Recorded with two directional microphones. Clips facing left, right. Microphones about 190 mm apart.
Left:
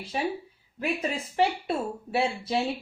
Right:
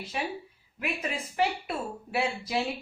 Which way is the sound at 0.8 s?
30° left (ahead or behind).